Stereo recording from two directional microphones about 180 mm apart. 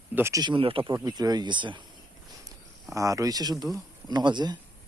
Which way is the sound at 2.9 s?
15° right (ahead or behind).